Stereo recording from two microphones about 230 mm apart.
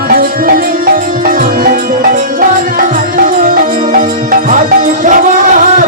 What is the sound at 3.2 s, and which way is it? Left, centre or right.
Music, right.